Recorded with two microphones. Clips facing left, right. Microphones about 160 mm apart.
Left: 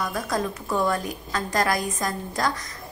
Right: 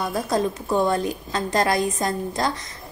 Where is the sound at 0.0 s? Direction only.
30° right (ahead or behind).